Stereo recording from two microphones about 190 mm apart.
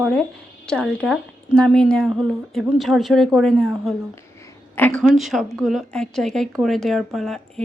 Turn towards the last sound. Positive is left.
turn(degrees=0)  # may be behind; listen again after turning